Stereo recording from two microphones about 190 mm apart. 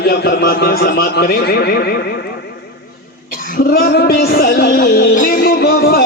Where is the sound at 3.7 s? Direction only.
50° left (ahead or behind).